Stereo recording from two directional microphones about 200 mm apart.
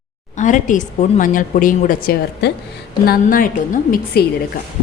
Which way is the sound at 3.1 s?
45° left (ahead or behind).